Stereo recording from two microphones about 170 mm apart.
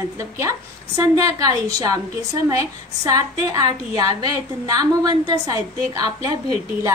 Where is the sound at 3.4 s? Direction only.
20° right (ahead or behind).